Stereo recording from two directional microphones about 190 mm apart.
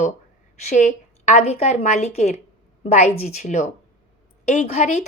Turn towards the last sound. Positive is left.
turn(degrees=35)  # may be behind; listen again after turning